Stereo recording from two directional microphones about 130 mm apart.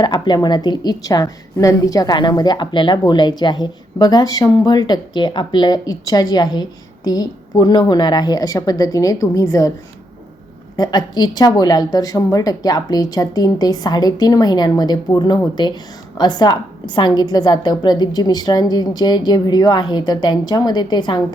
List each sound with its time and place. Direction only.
0.0 s a woman's voice: 35° left (ahead or behind)
10.8 s a woman's voice: 30° left (ahead or behind)